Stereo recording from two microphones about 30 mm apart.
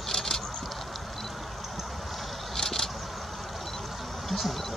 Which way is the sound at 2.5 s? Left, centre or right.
Centre.